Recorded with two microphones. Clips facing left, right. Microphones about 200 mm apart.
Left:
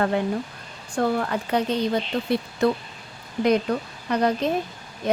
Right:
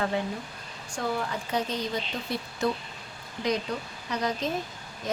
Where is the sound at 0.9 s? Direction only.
60° left (ahead or behind).